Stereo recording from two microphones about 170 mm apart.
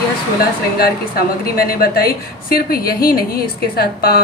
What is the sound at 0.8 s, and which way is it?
A woman's voice, 60° left (ahead or behind).